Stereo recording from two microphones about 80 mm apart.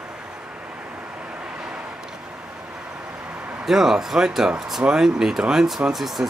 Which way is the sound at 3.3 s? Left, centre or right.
Centre.